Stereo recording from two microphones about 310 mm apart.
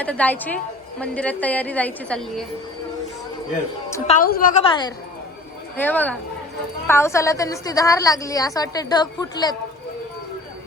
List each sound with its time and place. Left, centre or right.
0.0 s a woman's voice: centre
4.0 s a woman's voice: left
5.7 s a woman's voice: centre